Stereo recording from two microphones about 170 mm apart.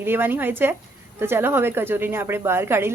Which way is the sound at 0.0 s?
10° right (ahead or behind).